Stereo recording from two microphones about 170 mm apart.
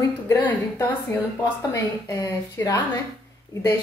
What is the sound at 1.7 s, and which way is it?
Speech, 20° left (ahead or behind).